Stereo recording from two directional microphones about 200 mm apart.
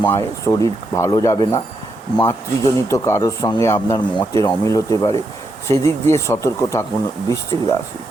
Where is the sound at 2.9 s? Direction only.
15° left (ahead or behind).